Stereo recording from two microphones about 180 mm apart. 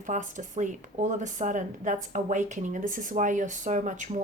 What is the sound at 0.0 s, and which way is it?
Speech, 45° right (ahead or behind).